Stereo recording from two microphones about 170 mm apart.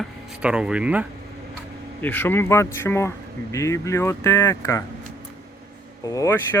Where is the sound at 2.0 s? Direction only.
10° left (ahead or behind).